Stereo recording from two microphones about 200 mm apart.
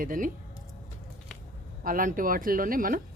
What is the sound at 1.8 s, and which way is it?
Speech, 40° right (ahead or behind).